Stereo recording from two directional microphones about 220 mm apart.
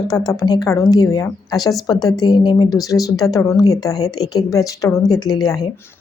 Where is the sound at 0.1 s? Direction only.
15° left (ahead or behind).